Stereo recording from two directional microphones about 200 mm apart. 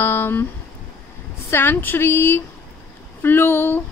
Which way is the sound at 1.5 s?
10° left (ahead or behind).